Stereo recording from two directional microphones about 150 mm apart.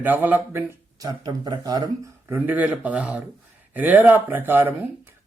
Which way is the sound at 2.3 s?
10° right (ahead or behind).